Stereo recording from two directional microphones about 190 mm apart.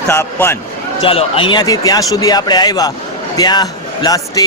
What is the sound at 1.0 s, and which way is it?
A man's voice, 30° left (ahead or behind).